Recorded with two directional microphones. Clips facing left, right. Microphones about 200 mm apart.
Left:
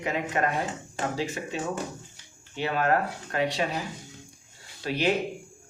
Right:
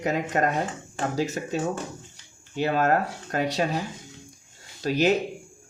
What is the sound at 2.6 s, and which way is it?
Speech, 40° right (ahead or behind).